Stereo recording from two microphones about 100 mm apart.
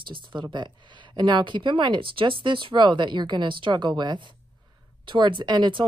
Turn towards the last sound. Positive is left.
turn(degrees=-55)  # may be behind; listen again after turning